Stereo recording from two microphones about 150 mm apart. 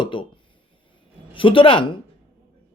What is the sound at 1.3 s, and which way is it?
Speech, 35° left (ahead or behind).